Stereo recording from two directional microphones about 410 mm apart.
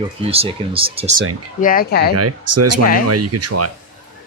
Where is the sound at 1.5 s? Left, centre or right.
Centre.